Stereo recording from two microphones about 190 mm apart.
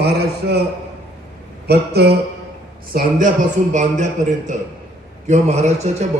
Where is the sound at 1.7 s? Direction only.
60° right (ahead or behind).